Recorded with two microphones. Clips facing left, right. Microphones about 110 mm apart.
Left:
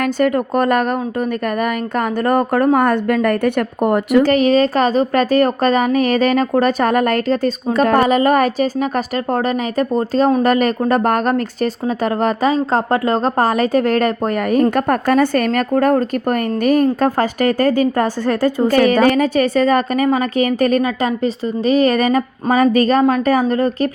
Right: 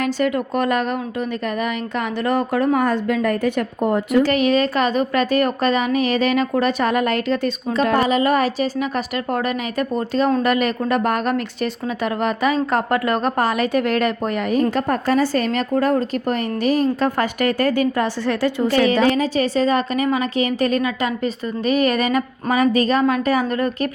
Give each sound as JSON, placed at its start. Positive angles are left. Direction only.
{"t": 0.0, "sound": "speech", "side_deg": 45}
{"t": 2.0, "sound": "a woman's voice", "side_deg": 45}
{"t": 4.2, "sound": "speech", "side_deg": 40}
{"t": 14.5, "sound": "speech", "side_deg": 55}